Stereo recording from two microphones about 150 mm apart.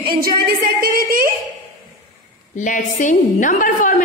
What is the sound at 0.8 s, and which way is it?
Speech, 70° right (ahead or behind).